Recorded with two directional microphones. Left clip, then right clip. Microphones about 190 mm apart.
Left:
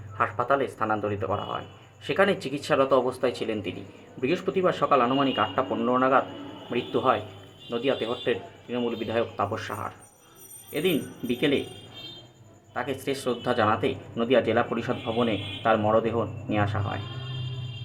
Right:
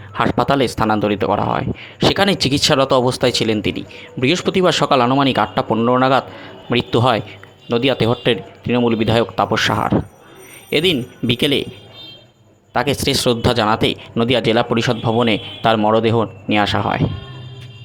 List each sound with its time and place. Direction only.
0.1 s speech: 50° right (ahead or behind)
12.7 s speech: 50° right (ahead or behind)